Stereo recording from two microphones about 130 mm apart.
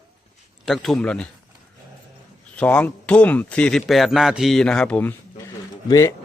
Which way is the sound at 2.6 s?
10° left (ahead or behind).